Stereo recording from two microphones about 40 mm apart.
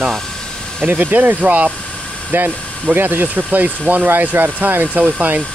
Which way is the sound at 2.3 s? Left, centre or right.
Right.